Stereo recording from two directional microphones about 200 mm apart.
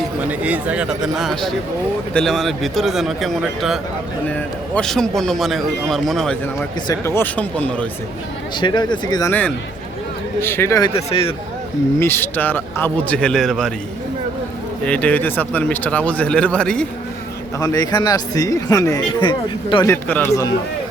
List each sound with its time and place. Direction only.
0.3 s a man's voice: 5° right (ahead or behind)
6.8 s speech: 15° left (ahead or behind)
8.6 s speech: 20° left (ahead or behind)
10.4 s speech: 10° left (ahead or behind)
10.9 s speech: 30° left (ahead or behind)
11.9 s speech: 10° left (ahead or behind)
14.8 s speech: 5° left (ahead or behind)
17.6 s speech: 15° left (ahead or behind)
19.9 s speech: 10° left (ahead or behind)